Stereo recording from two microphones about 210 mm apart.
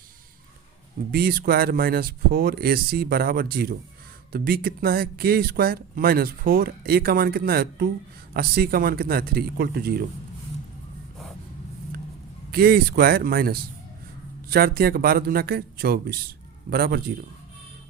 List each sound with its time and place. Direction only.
1.1 s speech: 45° right (ahead or behind)
12.5 s speech: 45° right (ahead or behind)